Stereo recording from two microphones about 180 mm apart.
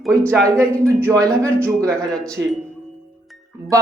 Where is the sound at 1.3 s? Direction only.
5° left (ahead or behind).